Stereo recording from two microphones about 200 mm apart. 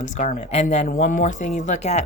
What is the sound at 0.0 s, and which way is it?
Speech, 40° left (ahead or behind).